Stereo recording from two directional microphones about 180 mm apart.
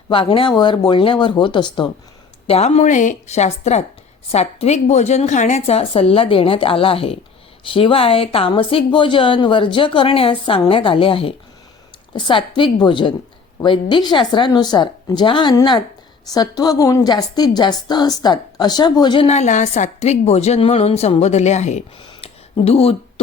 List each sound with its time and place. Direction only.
0.1 s speech: 30° left (ahead or behind)
2.5 s a woman's voice: 35° left (ahead or behind)